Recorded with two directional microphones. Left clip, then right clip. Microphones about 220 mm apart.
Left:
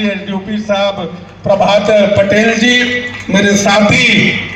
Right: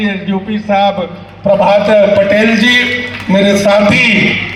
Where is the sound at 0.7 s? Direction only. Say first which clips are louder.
Right 3 dB; 45° right (ahead or behind).